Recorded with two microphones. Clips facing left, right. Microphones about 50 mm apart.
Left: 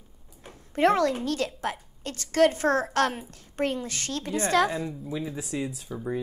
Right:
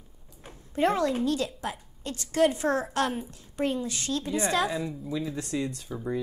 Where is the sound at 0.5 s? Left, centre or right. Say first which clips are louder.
Left 3 dB; left.